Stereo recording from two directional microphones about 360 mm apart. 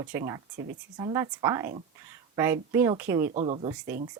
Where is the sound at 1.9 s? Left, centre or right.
Centre.